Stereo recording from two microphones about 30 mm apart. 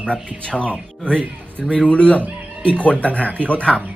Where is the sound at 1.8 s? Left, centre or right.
Left.